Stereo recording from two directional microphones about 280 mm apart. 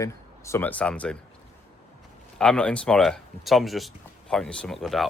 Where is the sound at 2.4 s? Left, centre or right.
Centre.